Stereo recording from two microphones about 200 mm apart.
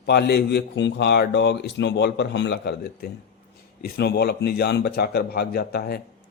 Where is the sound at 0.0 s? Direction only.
55° left (ahead or behind).